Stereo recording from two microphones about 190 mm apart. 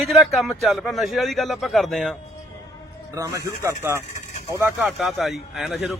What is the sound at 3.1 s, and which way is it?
Speech, 15° right (ahead or behind).